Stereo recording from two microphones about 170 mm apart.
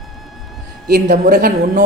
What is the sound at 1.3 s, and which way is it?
Speech, 60° right (ahead or behind).